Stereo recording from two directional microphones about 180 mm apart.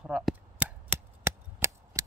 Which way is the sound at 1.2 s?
15° right (ahead or behind).